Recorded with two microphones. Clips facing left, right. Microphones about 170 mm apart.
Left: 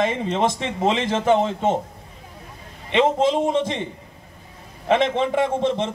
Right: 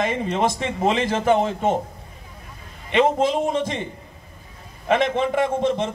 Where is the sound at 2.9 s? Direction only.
25° left (ahead or behind).